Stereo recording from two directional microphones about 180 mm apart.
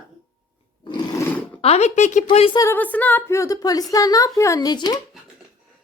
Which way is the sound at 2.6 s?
10° left (ahead or behind).